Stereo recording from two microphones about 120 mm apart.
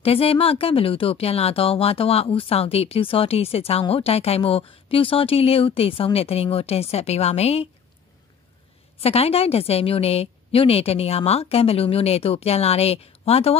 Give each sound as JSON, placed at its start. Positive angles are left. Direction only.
{"t": 0.0, "sound": "a woman's voice", "side_deg": 55}
{"t": 9.0, "sound": "a woman's voice", "side_deg": 55}